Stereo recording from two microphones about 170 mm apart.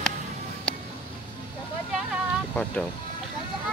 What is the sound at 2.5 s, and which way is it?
Speech, 5° left (ahead or behind).